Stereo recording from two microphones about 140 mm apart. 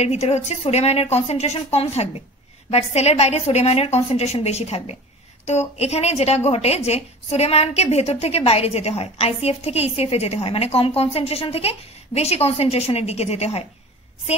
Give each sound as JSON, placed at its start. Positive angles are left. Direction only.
{"t": 0.0, "sound": "a woman's voice", "side_deg": 50}